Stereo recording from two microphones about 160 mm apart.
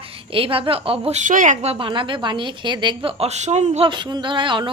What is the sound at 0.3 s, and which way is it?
A woman's voice, 35° right (ahead or behind).